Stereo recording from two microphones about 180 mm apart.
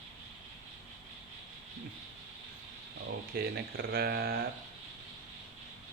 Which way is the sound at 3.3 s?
55° right (ahead or behind).